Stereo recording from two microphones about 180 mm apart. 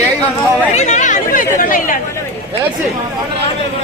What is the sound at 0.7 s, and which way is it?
Chatter, 40° left (ahead or behind).